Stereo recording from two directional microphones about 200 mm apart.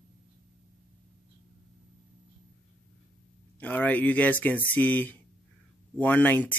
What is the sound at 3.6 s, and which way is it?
Speech, 10° left (ahead or behind).